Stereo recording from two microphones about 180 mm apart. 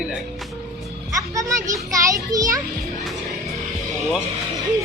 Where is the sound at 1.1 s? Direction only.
20° right (ahead or behind).